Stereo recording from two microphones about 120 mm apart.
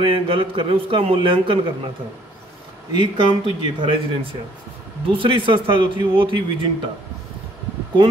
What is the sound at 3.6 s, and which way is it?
A man's voice, 45° right (ahead or behind).